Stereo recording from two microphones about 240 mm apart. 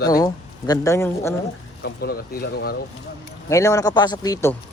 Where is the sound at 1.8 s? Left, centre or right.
Left.